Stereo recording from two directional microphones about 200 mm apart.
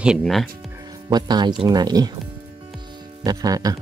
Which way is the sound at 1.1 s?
20° right (ahead or behind).